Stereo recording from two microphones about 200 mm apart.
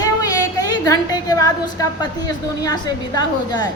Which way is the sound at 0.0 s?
15° left (ahead or behind).